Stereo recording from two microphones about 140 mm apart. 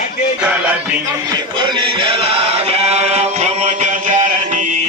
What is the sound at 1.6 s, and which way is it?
Chant, 35° right (ahead or behind).